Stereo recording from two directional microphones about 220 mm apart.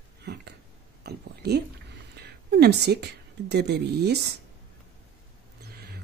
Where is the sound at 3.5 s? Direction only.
50° right (ahead or behind).